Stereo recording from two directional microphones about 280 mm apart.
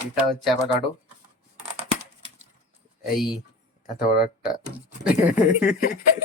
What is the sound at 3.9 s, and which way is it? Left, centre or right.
Speech, left.